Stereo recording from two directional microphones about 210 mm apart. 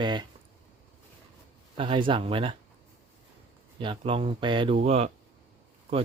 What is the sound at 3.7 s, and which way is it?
Speech, 25° right (ahead or behind).